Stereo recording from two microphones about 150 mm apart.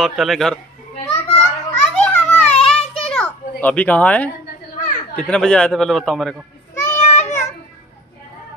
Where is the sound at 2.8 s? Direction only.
40° left (ahead or behind).